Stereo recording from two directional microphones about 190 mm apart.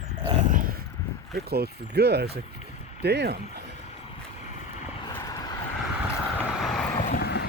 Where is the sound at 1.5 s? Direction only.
55° right (ahead or behind).